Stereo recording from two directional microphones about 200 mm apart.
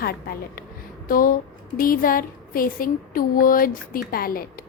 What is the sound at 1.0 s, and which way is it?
A woman's voice, 45° left (ahead or behind).